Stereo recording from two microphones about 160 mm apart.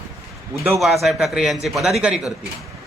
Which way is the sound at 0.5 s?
15° right (ahead or behind).